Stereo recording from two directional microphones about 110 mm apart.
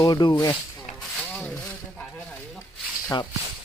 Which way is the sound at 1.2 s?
15° left (ahead or behind).